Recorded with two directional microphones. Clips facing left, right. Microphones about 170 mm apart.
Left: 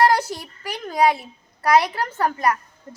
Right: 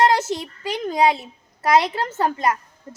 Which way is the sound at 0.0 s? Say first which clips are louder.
Even; 20° right (ahead or behind).